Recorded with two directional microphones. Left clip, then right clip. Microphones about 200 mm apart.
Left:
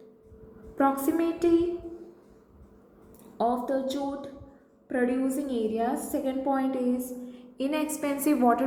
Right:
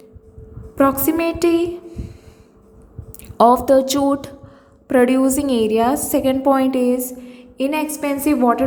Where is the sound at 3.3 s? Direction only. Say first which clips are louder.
Right 15 dB; 45° right (ahead or behind).